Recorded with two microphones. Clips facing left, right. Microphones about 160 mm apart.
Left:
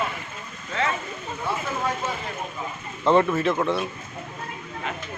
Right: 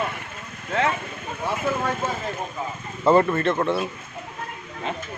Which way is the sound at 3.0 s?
5° right (ahead or behind).